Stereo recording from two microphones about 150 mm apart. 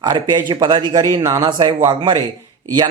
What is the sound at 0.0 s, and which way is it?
A man's voice, 30° right (ahead or behind).